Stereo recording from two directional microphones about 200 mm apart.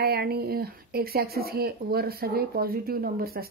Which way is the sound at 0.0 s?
50° right (ahead or behind).